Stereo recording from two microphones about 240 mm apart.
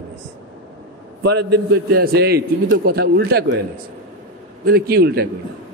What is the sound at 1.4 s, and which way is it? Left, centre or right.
Speech, right.